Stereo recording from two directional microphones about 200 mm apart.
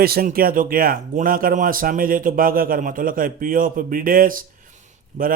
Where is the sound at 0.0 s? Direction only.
50° right (ahead or behind).